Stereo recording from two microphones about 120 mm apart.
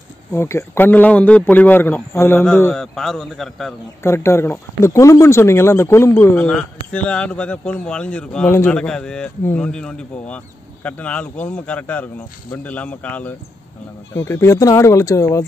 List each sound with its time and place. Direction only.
0.3 s speech: 25° left (ahead or behind)
2.7 s a man's voice: 5° left (ahead or behind)
4.0 s speech: 20° left (ahead or behind)
8.5 s speech: 20° left (ahead or behind)
8.7 s speech: 5° left (ahead or behind)
9.4 s speech: 15° left (ahead or behind)
9.7 s speech: 5° left (ahead or behind); by 15.4 s 25° left (ahead or behind)